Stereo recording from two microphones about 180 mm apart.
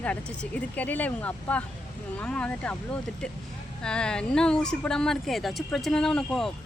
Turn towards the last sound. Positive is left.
turn(degrees=5)  # may be behind; listen again after turning